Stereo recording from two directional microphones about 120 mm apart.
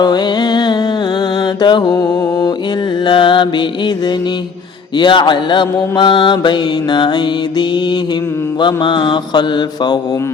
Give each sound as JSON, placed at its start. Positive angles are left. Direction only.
{"t": 0.0, "sound": "music", "side_deg": 35}
{"t": 1.4, "sound": "mantra", "side_deg": 40}
{"t": 3.0, "sound": "music", "side_deg": 40}
{"t": 4.9, "sound": "mantra", "side_deg": 40}